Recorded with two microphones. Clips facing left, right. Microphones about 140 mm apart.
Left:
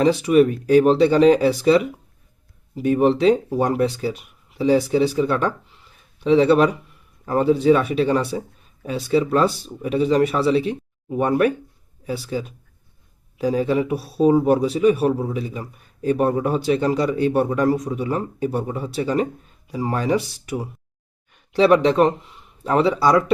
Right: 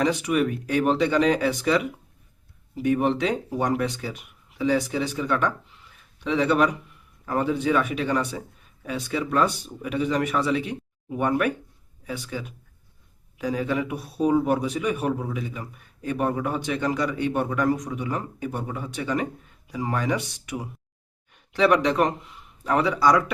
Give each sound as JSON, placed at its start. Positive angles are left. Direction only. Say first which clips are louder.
{"t": 0.0, "sound": "speech", "louder": "left 7 dB", "side_deg": 30}